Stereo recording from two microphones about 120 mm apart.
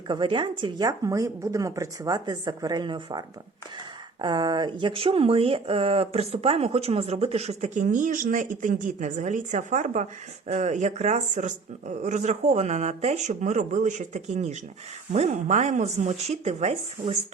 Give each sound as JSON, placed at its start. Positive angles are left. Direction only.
{"t": 0.1, "sound": "speech", "side_deg": -40}
{"t": 0.9, "sound": "speech", "side_deg": -25}